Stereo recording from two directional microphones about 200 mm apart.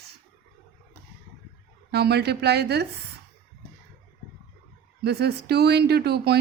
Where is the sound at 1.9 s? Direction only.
55° right (ahead or behind).